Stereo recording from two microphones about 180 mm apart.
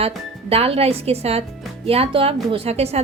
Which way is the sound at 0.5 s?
35° right (ahead or behind).